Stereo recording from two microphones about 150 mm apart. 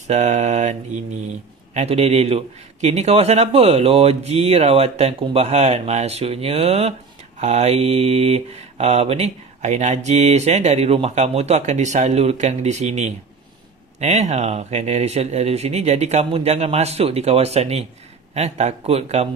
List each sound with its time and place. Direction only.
0.1 s mantra: 50° right (ahead or behind)